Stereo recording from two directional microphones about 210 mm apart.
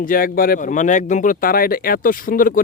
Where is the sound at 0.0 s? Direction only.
40° left (ahead or behind).